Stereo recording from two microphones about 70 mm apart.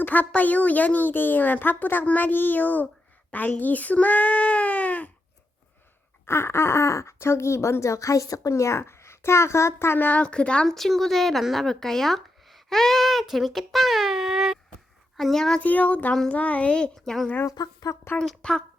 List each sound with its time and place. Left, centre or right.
0.0 s a woman's voice: left
6.2 s speech: left
9.7 s speech: left
10.1 s a woman's voice: centre
10.8 s speech: centre
15.2 s a woman's voice: centre
15.6 s a woman's voice: left
17.5 s speech: left
18.2 s a woman's voice: centre